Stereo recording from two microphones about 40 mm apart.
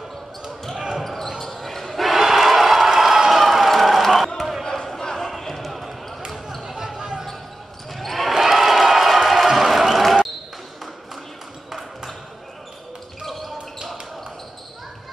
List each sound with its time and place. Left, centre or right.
0.7 s basketball bounce: centre
1.0 s basketball bounce: centre
2.0 s crowd: centre
4.4 s battle cry: centre
4.8 s basketball bounce: centre
6.6 s a sound: centre
7.0 s basketball bounce: centre
7.9 s basketball bounce: centre
13.2 s a sound: centre